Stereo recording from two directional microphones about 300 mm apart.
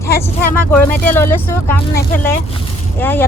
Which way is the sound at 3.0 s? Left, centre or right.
Centre.